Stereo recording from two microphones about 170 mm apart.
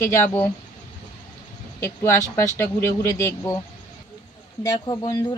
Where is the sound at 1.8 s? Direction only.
15° left (ahead or behind).